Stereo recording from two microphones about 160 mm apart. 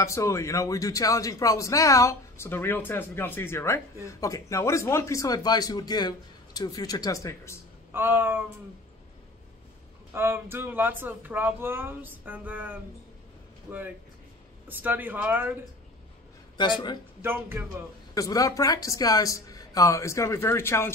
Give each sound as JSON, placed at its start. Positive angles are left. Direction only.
{"t": 0.0, "sound": "a man's voice", "side_deg": 20}
{"t": 7.9, "sound": "speech", "side_deg": -15}
{"t": 10.1, "sound": "speech", "side_deg": -15}
{"t": 16.5, "sound": "a man's voice", "side_deg": 30}
{"t": 17.2, "sound": "speech", "side_deg": -15}
{"t": 18.1, "sound": "a man's voice", "side_deg": 20}